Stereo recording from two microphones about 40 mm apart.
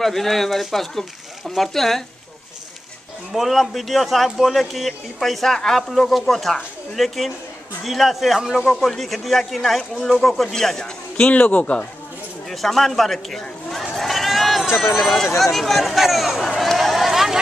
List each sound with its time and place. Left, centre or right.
0.0 s speech: centre
3.3 s speech: centre
11.2 s speech: left
12.4 s a sound: centre
14.8 s speech: centre
16.6 s run: centre